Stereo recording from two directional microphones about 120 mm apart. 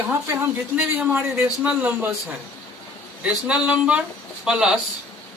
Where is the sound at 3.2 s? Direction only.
10° right (ahead or behind).